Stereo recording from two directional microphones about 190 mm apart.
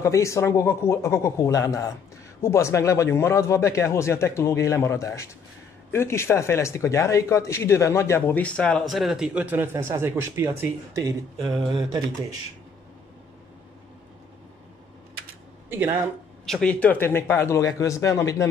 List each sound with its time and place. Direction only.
0.0 s speech: 15° left (ahead or behind); by 12.3 s 20° right (ahead or behind)
15.7 s speech: 10° right (ahead or behind)
16.4 s speech: 5° left (ahead or behind)